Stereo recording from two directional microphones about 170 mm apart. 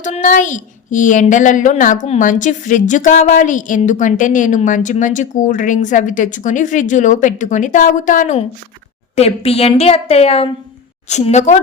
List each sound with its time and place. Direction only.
0.0 s a woman's voice: 45° left (ahead or behind)
9.1 s a woman's voice: 35° left (ahead or behind)